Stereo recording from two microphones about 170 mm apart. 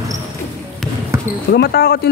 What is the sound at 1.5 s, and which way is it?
Speech, 70° left (ahead or behind).